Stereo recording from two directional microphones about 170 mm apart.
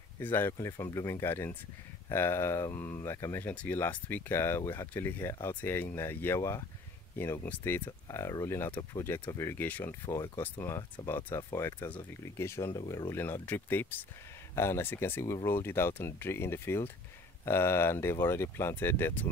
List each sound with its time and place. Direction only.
0.2 s speech: 10° left (ahead or behind)